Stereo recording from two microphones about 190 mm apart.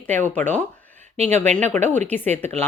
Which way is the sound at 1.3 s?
10° left (ahead or behind).